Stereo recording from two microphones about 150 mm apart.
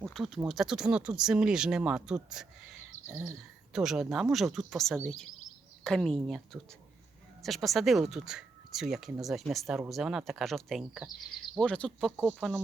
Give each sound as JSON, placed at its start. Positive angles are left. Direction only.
{"t": 0.0, "sound": "speech", "side_deg": 0}
{"t": 3.1, "sound": "speech", "side_deg": -20}
{"t": 3.7, "sound": "speech", "side_deg": -5}